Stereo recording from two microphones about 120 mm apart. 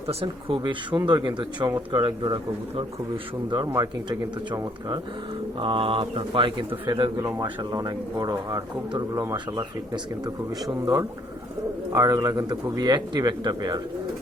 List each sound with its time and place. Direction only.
0.1 s speech: 50° right (ahead or behind)
3.7 s speech: 30° right (ahead or behind)
5.5 s speech: 45° right (ahead or behind)
7.2 s speech: 30° right (ahead or behind)